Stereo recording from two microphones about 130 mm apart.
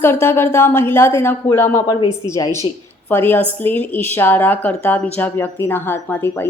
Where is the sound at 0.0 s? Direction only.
20° left (ahead or behind).